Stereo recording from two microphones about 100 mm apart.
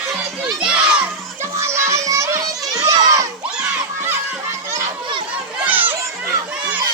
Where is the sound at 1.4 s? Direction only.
25° right (ahead or behind).